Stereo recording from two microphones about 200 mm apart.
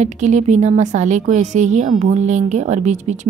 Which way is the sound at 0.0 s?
35° right (ahead or behind).